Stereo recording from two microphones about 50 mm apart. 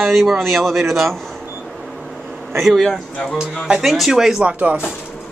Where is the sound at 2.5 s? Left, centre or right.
Centre.